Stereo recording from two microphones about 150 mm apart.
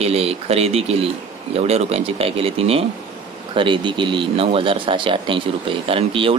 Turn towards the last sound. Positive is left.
turn(degrees=-35)  # may be behind; listen again after turning